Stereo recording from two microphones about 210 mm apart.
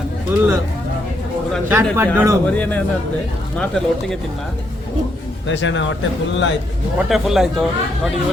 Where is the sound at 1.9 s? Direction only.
15° right (ahead or behind).